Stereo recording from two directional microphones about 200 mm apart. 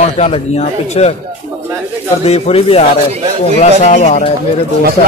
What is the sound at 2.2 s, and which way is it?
Speech, 30° left (ahead or behind).